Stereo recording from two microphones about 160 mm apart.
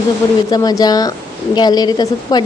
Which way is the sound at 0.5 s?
25° left (ahead or behind).